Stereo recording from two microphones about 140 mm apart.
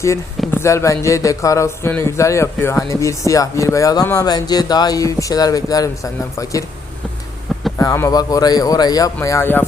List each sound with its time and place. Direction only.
0.0 s speech: 20° left (ahead or behind)
7.8 s speech: 20° left (ahead or behind)